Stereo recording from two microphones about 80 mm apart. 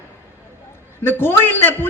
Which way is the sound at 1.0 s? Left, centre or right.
Left.